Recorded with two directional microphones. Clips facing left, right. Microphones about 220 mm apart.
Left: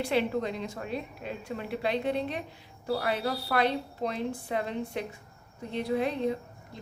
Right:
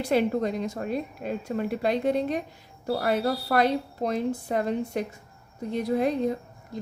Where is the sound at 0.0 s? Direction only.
45° right (ahead or behind).